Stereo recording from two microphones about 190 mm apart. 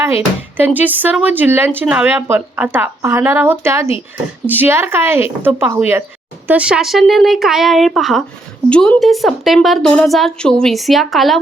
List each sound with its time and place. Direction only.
0.0 s a woman's voice: 10° right (ahead or behind)